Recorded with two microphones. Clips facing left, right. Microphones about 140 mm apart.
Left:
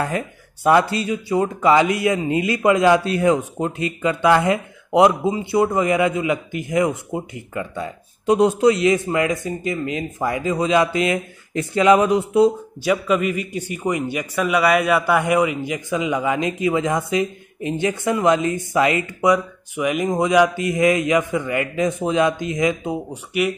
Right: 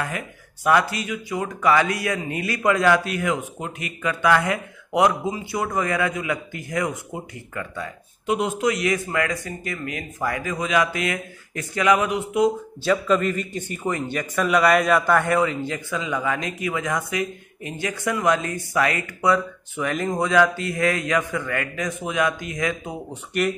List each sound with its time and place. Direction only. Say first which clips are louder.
0.7 s a man's voice: left 4 dB; 25° left (ahead or behind)
8.3 s a man's voice: left 7 dB; 35° left (ahead or behind)
12.8 s a man's voice: left 1 dB; 10° left (ahead or behind)
23.3 s speech: left 2 dB; 5° left (ahead or behind)